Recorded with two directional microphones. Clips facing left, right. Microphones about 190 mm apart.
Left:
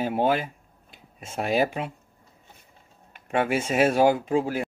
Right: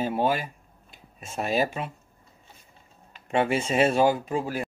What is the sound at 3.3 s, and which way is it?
Speech, 10° left (ahead or behind).